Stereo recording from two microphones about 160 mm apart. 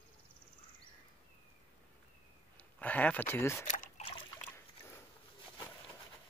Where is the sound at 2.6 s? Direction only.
10° left (ahead or behind).